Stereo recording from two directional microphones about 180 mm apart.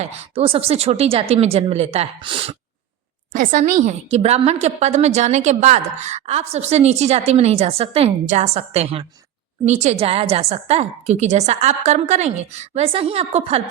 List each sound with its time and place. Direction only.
0.0 s a woman's voice: 35° right (ahead or behind)
3.3 s a woman's voice: 45° right (ahead or behind)